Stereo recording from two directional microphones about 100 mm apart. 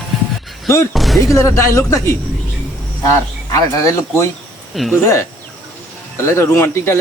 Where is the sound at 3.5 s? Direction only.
35° left (ahead or behind).